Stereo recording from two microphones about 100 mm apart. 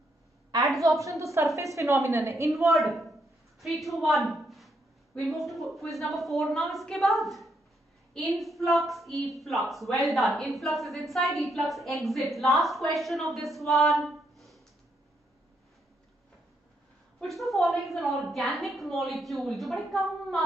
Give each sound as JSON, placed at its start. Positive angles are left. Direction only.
{"t": 0.7, "sound": "a woman's voice", "side_deg": 0}
{"t": 1.0, "sound": "a woman's voice", "side_deg": -30}
{"t": 2.7, "sound": "a woman's voice", "side_deg": 0}
{"t": 17.2, "sound": "a woman's voice", "side_deg": 0}